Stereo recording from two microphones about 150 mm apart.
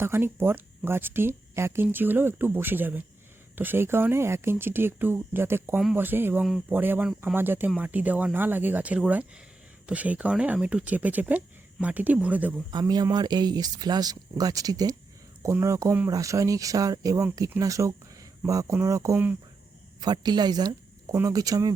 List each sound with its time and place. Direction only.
0.0 s speech: 15° right (ahead or behind)
12.8 s speech: 25° right (ahead or behind)
20.0 s speech: 30° right (ahead or behind)